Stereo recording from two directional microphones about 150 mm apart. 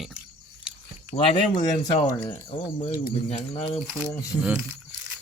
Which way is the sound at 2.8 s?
50° left (ahead or behind).